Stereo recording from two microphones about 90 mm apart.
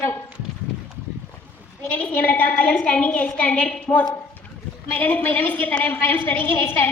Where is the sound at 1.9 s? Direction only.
15° left (ahead or behind).